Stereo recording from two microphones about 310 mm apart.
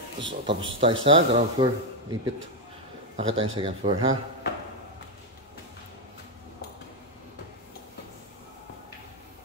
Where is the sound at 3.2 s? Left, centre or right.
Centre.